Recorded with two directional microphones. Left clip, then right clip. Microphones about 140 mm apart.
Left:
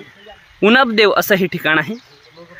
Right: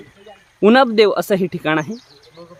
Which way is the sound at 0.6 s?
Centre (ahead or behind).